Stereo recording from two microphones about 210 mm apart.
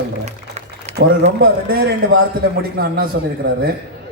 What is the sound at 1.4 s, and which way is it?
Speech, 45° right (ahead or behind).